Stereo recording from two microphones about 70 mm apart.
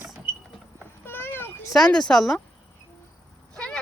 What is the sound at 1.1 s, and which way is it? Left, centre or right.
Cat, left.